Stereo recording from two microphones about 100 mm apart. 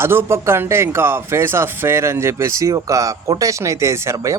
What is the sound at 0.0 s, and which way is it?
Speech, 25° right (ahead or behind).